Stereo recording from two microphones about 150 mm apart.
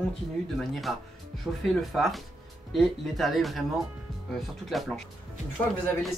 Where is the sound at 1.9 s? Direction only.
Centre (ahead or behind).